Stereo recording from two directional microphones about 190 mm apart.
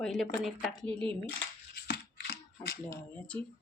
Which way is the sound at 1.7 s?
60° left (ahead or behind).